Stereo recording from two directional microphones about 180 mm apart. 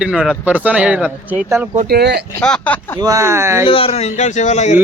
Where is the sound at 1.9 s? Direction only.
65° right (ahead or behind).